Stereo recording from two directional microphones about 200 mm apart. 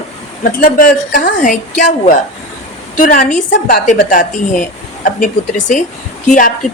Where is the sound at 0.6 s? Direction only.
45° left (ahead or behind).